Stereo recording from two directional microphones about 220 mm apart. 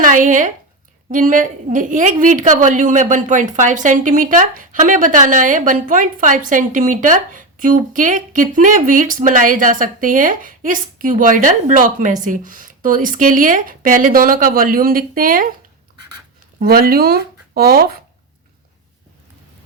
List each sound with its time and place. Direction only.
0.0 s a woman's voice: 35° right (ahead or behind)
16.6 s speech: 40° right (ahead or behind)